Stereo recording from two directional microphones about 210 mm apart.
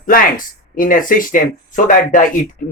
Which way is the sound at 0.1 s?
40° left (ahead or behind).